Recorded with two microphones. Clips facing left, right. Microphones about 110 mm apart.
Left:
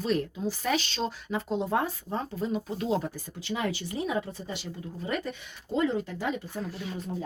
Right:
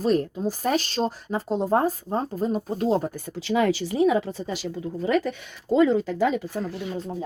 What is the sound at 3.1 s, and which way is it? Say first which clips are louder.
Speech: right 10 dB; 75° right (ahead or behind).